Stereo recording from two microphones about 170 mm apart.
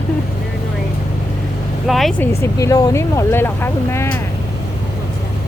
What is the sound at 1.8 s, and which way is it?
Speech, centre (ahead or behind).